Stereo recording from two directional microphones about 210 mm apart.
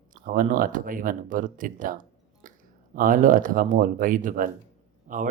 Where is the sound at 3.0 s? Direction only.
40° right (ahead or behind).